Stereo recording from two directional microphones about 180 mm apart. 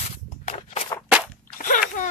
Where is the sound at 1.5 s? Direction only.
50° left (ahead or behind).